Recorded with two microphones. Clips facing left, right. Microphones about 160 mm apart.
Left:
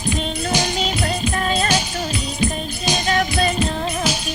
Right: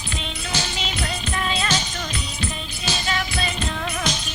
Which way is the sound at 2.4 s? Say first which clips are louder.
Left 9 dB; 15° left (ahead or behind).